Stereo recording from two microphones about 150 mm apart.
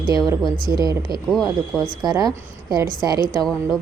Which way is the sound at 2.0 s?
25° right (ahead or behind).